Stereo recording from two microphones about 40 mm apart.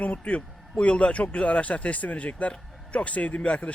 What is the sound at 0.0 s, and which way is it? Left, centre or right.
A man's voice, left.